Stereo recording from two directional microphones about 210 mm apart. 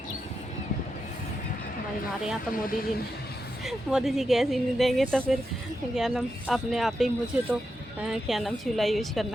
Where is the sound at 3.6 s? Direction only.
Centre (ahead or behind).